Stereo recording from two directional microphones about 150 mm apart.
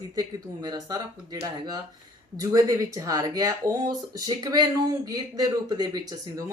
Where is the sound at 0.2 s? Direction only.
25° right (ahead or behind).